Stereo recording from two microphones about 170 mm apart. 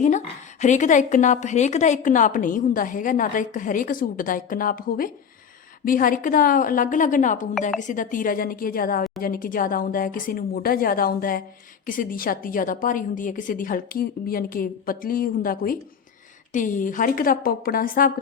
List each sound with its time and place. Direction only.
0.6 s a woman's voice: 45° left (ahead or behind)